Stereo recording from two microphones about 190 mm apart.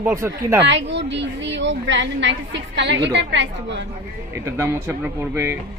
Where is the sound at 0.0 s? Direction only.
15° right (ahead or behind).